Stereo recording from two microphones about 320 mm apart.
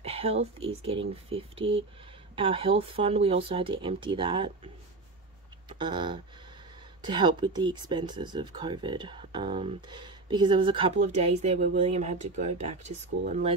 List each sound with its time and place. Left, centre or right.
0.0 s speech: centre
5.7 s a sound: centre
7.0 s speech: centre